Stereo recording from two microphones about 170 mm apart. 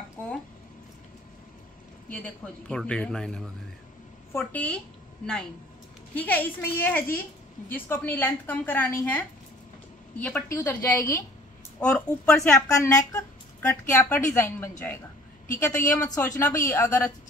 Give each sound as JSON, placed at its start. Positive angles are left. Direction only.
{"t": 2.0, "sound": "speech", "side_deg": 5}
{"t": 6.1, "sound": "speech", "side_deg": 10}
{"t": 12.4, "sound": "speech", "side_deg": 20}